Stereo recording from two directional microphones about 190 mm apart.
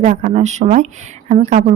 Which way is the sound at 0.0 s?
40° right (ahead or behind).